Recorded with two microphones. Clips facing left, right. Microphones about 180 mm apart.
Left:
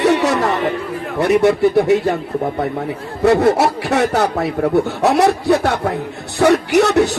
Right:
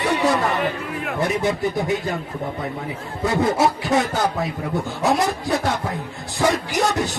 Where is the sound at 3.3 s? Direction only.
70° left (ahead or behind).